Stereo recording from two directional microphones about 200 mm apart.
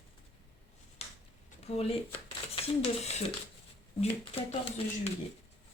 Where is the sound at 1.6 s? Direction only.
30° left (ahead or behind).